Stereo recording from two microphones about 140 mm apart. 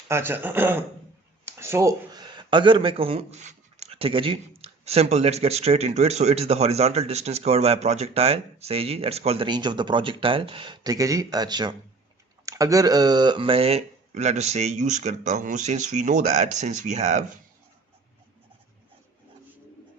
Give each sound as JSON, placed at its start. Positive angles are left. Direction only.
{"t": 0.1, "sound": "a man's voice", "side_deg": -15}